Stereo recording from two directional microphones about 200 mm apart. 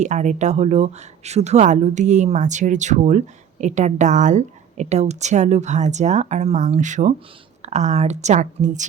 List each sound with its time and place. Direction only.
0.0 s speech: 35° right (ahead or behind)